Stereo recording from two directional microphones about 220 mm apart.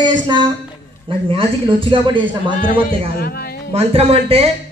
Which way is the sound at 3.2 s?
45° left (ahead or behind).